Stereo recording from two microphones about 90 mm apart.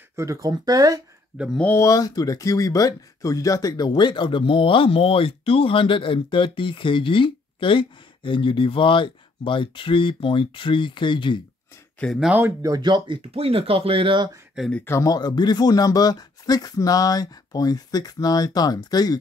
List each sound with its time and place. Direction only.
0.1 s speech: 35° right (ahead or behind)
1.8 s speech: 40° left (ahead or behind); by 11.4 s 65° left (ahead or behind)
12.0 s speech: 10° left (ahead or behind)
12.4 s speech: 30° right (ahead or behind)
12.8 s speech: 60° right (ahead or behind)
14.6 s speech: 5° right (ahead or behind)
15.0 s speech: 50° left (ahead or behind)